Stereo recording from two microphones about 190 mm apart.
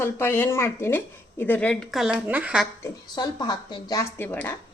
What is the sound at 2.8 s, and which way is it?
Speech, 20° left (ahead or behind).